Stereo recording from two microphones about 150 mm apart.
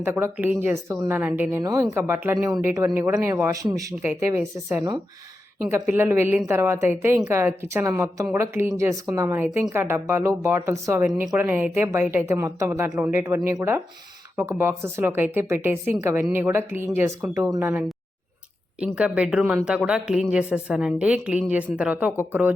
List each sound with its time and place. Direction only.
0.0 s a woman's voice: 15° right (ahead or behind)
18.9 s a woman's voice: 5° right (ahead or behind)